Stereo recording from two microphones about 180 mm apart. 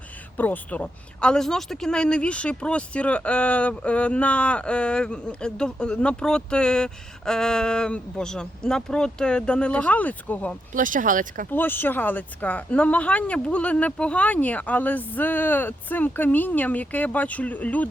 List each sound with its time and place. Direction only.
0.3 s speech: 10° left (ahead or behind)
10.8 s speech: 50° right (ahead or behind)
11.5 s speech: 10° left (ahead or behind)